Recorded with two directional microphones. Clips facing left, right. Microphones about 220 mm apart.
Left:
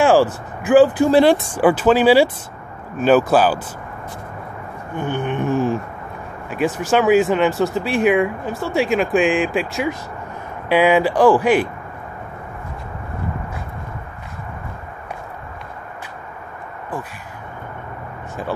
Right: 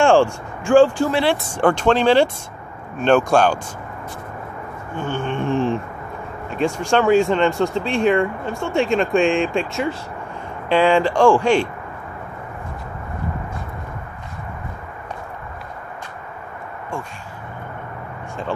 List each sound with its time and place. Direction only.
0.0 s speech: 5° left (ahead or behind)
1.1 s speech: 40° left (ahead or behind)
1.6 s speech: 5° left (ahead or behind)
4.9 s a sound: 15° left (ahead or behind)
5.4 s a sound: 5° left (ahead or behind)
6.5 s speech: 5° left (ahead or behind)